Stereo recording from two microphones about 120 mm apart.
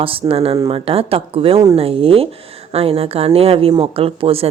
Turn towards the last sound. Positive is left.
turn(degrees=-50)  # may be behind; listen again after turning